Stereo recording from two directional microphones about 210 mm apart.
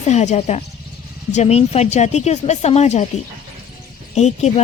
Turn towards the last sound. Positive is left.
turn(degrees=30)  # may be behind; listen again after turning